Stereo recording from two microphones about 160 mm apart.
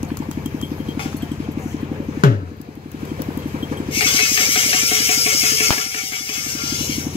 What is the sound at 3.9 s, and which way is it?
Music, 35° left (ahead or behind).